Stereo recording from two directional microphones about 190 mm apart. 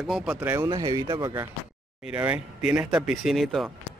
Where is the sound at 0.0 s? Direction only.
Centre (ahead or behind).